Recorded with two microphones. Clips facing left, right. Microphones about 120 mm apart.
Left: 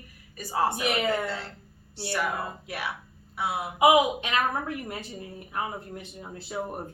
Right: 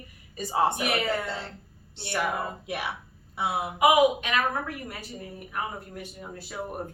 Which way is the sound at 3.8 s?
20° left (ahead or behind).